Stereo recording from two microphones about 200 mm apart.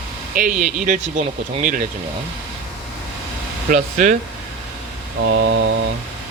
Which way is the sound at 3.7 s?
40° right (ahead or behind).